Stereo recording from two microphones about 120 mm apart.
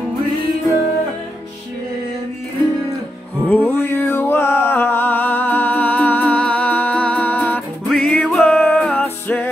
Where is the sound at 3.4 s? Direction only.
15° left (ahead or behind).